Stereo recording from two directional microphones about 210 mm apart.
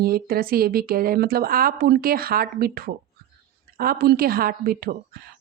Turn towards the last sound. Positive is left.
turn(degrees=-45)  # may be behind; listen again after turning